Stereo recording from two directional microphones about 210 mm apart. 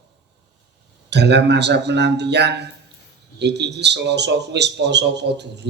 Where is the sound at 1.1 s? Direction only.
55° right (ahead or behind).